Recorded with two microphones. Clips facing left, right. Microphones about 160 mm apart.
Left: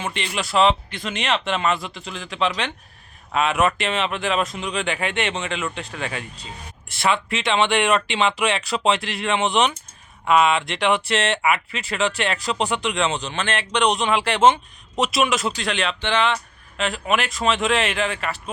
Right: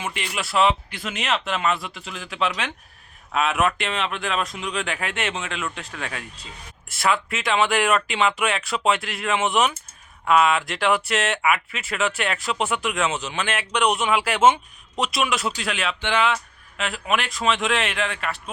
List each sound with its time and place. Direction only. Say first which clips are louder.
0.0 s speech: left 2 dB; 5° right (ahead or behind)